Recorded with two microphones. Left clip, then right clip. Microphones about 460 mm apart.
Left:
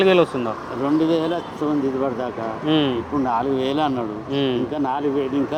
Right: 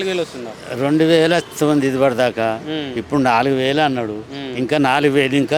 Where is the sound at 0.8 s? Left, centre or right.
Right.